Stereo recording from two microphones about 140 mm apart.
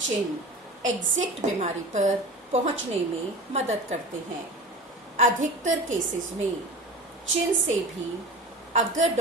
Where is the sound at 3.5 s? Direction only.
50° right (ahead or behind).